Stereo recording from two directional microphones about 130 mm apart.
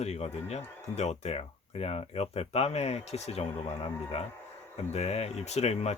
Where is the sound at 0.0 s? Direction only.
55° left (ahead or behind).